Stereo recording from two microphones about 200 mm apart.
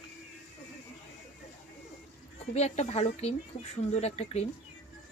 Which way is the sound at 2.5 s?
35° left (ahead or behind).